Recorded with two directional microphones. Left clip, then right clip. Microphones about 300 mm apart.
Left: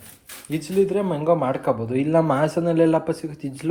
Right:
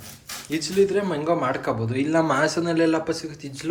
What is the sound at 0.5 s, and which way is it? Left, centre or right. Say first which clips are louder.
Speech: even; centre.